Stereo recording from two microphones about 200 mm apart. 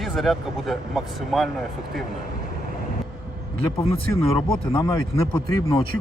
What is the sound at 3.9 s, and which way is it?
Speech, 20° left (ahead or behind).